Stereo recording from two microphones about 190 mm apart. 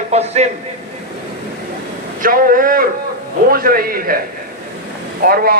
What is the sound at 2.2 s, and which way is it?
A man's voice, 50° right (ahead or behind).